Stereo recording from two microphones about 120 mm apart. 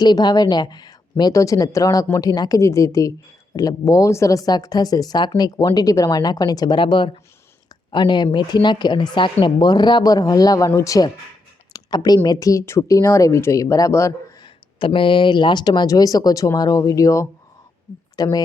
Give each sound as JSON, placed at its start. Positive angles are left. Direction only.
{"t": 0.0, "sound": "speech", "side_deg": 35}
{"t": 14.4, "sound": "speech", "side_deg": 45}